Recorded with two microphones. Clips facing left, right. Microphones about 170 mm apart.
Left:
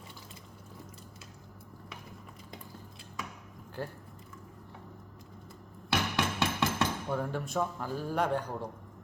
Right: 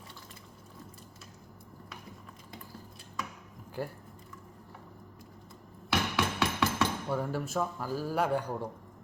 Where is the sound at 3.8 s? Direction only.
10° right (ahead or behind).